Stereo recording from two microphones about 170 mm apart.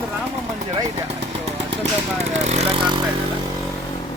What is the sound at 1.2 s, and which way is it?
Vehicle, 35° right (ahead or behind).